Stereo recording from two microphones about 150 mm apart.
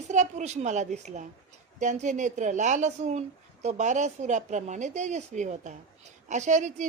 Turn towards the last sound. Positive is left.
turn(degrees=-55)  # may be behind; listen again after turning